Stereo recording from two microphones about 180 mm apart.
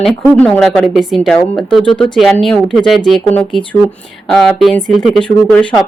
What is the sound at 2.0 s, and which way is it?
A woman's voice, centre (ahead or behind).